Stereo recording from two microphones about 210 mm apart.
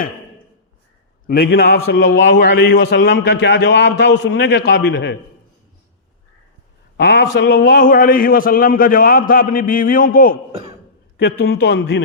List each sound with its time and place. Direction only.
1.5 s a man's voice: 50° left (ahead or behind)
6.9 s a man's voice: 50° left (ahead or behind)